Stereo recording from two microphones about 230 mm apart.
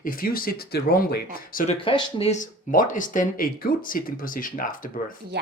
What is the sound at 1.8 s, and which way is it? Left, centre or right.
Speech, left.